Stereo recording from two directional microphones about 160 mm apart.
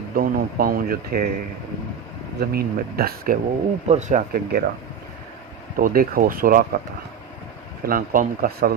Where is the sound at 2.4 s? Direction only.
70° right (ahead or behind).